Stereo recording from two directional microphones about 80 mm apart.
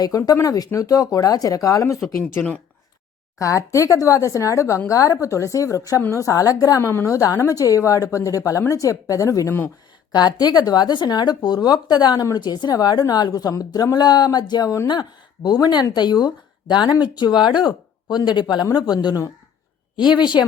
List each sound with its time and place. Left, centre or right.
0.3 s a woman's voice: left
2.3 s speech: left
3.3 s a woman's voice: left
10.1 s speech: left
12.4 s speech: left
20.1 s speech: left